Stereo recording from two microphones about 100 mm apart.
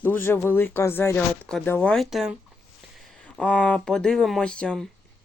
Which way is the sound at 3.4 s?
15° left (ahead or behind).